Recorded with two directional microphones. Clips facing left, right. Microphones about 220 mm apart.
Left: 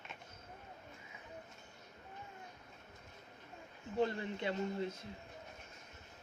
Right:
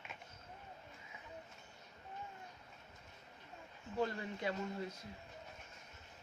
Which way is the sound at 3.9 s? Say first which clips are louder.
Left 3 dB; 25° left (ahead or behind).